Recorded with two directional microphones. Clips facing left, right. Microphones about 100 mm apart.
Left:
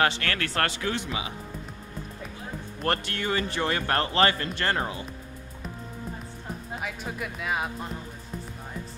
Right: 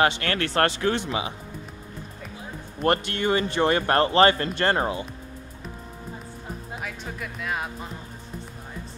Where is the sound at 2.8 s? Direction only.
20° right (ahead or behind).